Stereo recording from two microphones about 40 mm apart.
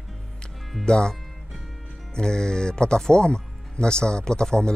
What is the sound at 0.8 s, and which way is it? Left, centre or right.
Speech, left.